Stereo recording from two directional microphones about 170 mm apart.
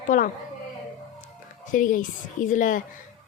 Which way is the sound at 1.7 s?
50° left (ahead or behind).